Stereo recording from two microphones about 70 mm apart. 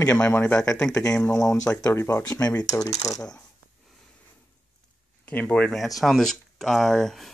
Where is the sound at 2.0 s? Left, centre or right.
Left.